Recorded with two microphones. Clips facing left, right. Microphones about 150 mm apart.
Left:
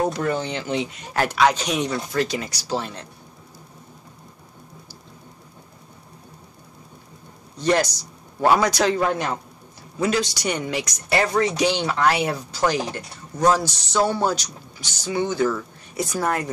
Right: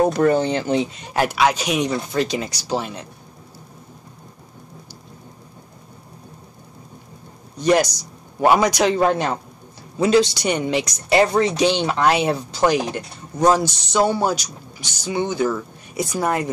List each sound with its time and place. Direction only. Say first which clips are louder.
0.0 s speech: right 7 dB; 55° right (ahead or behind)
0.3 s speech: right 6 dB; 40° right (ahead or behind)
1.1 s speech: right 1 dB; 10° right (ahead or behind)
7.5 s a man's voice: right 3 dB; 15° right (ahead or behind)